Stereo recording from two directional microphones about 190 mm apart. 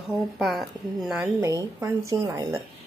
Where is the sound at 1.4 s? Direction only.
15° right (ahead or behind).